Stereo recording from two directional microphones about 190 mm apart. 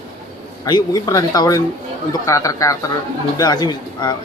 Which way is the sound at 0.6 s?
20° left (ahead or behind).